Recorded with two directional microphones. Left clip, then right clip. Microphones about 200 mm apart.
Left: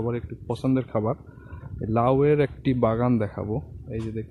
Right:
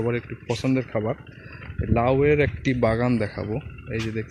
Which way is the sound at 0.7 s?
15° left (ahead or behind).